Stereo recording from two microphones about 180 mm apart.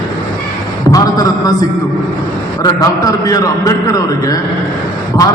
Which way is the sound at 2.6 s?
20° left (ahead or behind).